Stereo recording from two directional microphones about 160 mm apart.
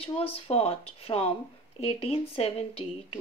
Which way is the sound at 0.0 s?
35° left (ahead or behind).